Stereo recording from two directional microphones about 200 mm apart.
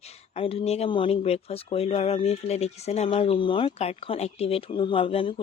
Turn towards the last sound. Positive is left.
turn(degrees=25)  # may be behind; listen again after turning